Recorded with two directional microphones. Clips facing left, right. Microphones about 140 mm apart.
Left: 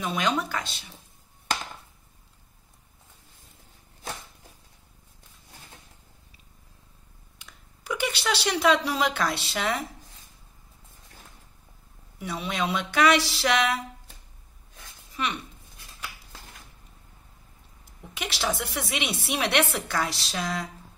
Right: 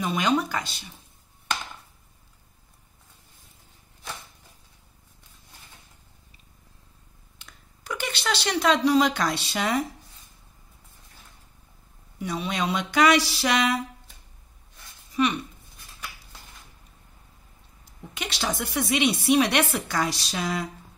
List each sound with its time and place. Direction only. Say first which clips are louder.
0.0 s a woman's voice: right 3 dB; centre (ahead or behind)
7.3 s speech: even; 10° left (ahead or behind)
12.2 s a woman's voice: right 1 dB; 5° left (ahead or behind)
15.1 s a woman's voice: right 7 dB; centre (ahead or behind)
18.1 s a woman's voice: even; 5° left (ahead or behind)